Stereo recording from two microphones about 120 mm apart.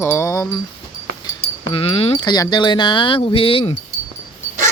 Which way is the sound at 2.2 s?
35° left (ahead or behind).